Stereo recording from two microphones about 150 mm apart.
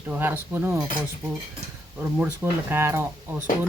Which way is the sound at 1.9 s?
10° right (ahead or behind).